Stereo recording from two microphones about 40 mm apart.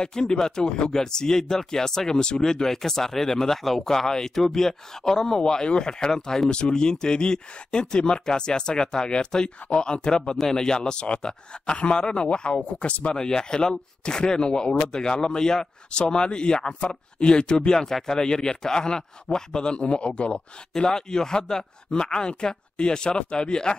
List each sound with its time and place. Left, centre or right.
0.0 s speech: centre
13.2 s speech: centre